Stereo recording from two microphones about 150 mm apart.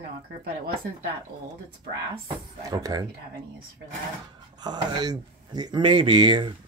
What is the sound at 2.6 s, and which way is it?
Speech, 25° right (ahead or behind).